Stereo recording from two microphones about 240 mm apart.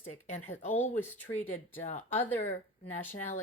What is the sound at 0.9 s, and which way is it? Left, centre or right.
Speech, centre.